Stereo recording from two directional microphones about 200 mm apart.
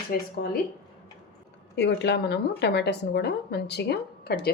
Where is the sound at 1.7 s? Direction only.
60° left (ahead or behind).